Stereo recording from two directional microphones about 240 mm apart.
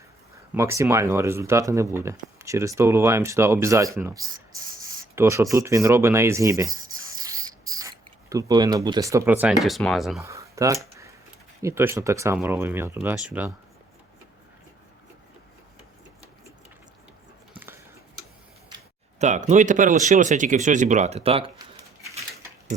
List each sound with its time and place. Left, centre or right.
0.5 s speech: centre
10.2 s speech: centre
19.2 s speech: right